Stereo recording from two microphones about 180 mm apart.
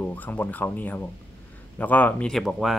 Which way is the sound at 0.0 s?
10° left (ahead or behind).